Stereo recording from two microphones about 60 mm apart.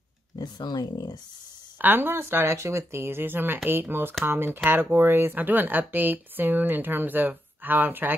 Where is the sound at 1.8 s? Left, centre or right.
Right.